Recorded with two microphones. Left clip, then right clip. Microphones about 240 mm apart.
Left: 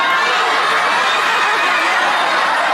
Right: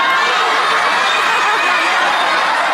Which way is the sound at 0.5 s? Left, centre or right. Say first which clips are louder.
Right 1 dB; centre.